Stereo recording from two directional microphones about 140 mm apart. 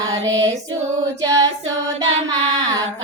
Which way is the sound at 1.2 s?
25° right (ahead or behind).